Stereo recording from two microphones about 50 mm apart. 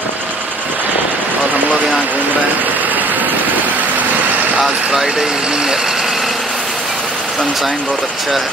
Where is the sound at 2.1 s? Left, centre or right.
Right.